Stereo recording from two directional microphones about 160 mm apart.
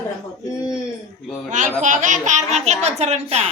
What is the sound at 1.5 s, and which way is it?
Speech, 50° right (ahead or behind).